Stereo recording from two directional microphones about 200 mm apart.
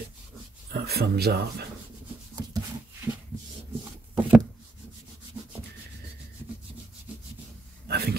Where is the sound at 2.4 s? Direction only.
20° right (ahead or behind).